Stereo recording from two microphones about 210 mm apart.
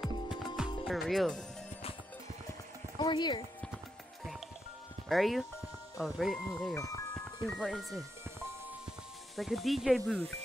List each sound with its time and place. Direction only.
0.0 s music: centre (ahead or behind)
0.8 s speech: centre (ahead or behind)
3.0 s speech: 20° left (ahead or behind)
5.0 s speech: centre (ahead or behind)
6.7 s speech: 15° left (ahead or behind)
7.4 s speech: centre (ahead or behind)
9.4 s speech: centre (ahead or behind)